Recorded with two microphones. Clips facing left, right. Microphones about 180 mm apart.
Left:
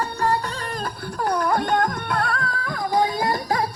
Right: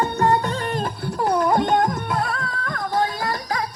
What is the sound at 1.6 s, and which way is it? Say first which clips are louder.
Music: right 3 dB; centre (ahead or behind).